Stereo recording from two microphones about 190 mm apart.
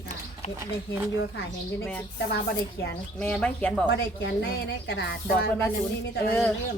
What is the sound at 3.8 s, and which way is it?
Speech, 60° left (ahead or behind).